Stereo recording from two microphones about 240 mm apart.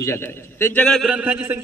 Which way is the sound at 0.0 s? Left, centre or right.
Centre.